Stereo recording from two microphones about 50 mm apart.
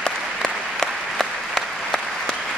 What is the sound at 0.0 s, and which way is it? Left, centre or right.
Applause, centre.